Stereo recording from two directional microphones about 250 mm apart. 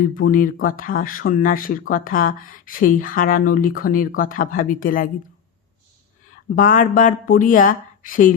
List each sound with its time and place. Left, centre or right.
0.1 s speech: left
6.6 s speech: left